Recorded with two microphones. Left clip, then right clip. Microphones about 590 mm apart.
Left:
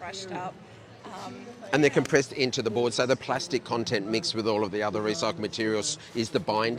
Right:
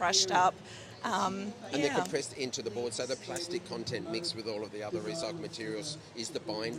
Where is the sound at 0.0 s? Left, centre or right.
Right.